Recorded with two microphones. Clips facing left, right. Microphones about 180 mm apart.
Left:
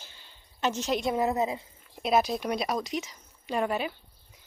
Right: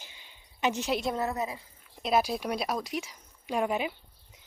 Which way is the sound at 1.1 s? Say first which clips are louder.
Left 5 dB; 15° left (ahead or behind).